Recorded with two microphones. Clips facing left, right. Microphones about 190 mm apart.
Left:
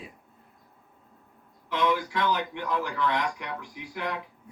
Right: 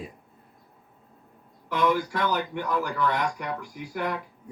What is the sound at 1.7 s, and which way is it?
Speech, 45° right (ahead or behind).